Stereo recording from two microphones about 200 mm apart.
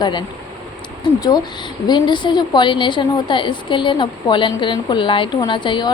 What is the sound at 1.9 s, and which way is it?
A woman's voice, 20° left (ahead or behind).